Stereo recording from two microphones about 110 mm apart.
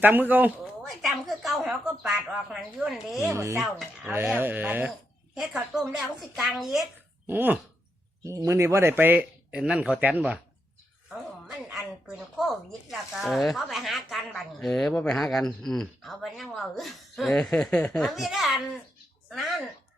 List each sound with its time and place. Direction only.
0.0 s speech: 15° right (ahead or behind)
0.6 s speech: centre (ahead or behind)
3.2 s speech: 25° right (ahead or behind)
3.6 s speech: centre (ahead or behind)
4.1 s speech: 20° right (ahead or behind)
4.9 s speech: 5° right (ahead or behind)
7.3 s speech: 15° right (ahead or behind)
8.2 s speech: 25° right (ahead or behind); by 10.4 s 10° right (ahead or behind)
12.4 s speech: centre (ahead or behind)